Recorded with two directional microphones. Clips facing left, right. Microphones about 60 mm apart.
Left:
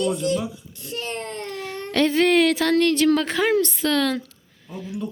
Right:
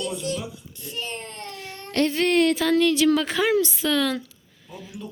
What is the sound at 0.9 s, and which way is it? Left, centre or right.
Speech, left.